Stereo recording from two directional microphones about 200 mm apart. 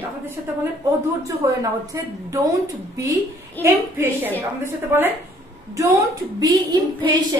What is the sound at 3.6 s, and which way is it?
Speech, 10° left (ahead or behind).